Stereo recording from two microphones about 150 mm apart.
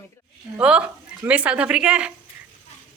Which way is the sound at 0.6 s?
5° right (ahead or behind).